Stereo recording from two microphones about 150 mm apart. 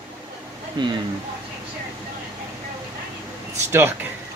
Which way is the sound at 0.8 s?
30° right (ahead or behind).